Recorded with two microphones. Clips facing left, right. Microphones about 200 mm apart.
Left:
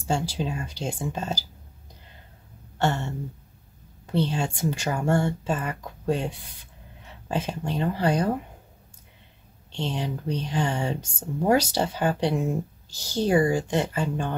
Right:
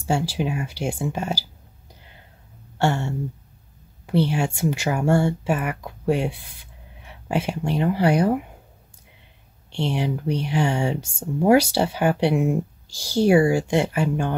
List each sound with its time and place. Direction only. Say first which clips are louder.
0.0 s speech: right 3 dB; 5° right (ahead or behind)
2.8 s speech: right 3 dB; 10° right (ahead or behind)
9.7 s speech: right 5 dB; 10° right (ahead or behind)